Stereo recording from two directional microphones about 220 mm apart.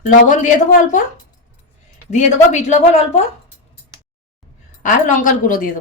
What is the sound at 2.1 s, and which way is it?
A woman's voice, 30° left (ahead or behind).